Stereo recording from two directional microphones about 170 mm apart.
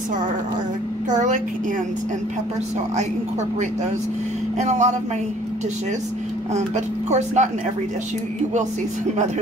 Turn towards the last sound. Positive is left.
turn(degrees=-40)  # may be behind; listen again after turning